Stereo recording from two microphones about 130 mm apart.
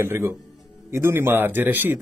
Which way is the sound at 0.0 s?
15° right (ahead or behind).